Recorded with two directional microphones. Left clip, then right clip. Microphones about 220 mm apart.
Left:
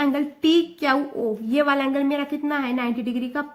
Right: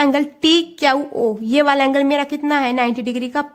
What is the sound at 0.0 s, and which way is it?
A woman's voice, 55° right (ahead or behind).